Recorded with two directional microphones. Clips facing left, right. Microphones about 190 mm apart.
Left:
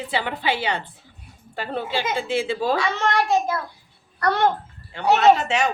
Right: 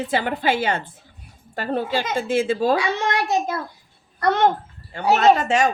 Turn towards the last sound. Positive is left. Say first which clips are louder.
# right 1 dB
turn(degrees=-45)  # may be behind; listen again after turning